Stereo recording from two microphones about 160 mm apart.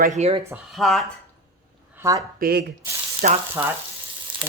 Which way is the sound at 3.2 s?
55° right (ahead or behind).